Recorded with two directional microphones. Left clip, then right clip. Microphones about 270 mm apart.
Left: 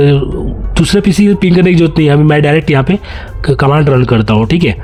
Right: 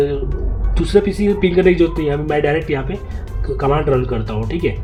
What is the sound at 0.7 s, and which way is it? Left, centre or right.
A man's voice, left.